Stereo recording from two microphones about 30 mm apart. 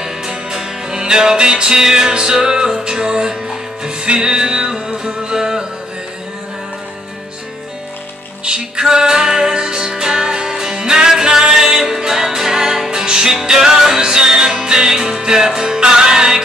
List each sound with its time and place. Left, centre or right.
0.5 s music: right
8.5 s music: right
13.0 s music: right